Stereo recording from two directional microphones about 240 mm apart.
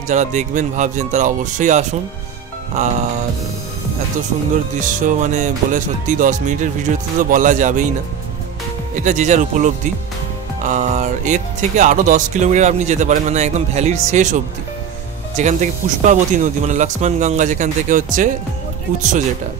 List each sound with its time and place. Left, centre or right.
0.1 s speech: right
4.7 s speech: right
9.0 s speech: right